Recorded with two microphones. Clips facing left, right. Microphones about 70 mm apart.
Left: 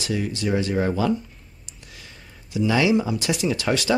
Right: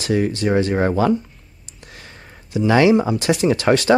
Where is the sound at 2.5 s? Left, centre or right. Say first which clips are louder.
Right 6 dB; right.